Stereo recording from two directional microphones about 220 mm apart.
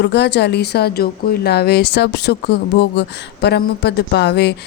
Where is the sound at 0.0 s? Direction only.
50° left (ahead or behind).